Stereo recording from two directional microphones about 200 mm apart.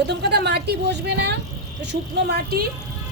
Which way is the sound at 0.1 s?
55° right (ahead or behind).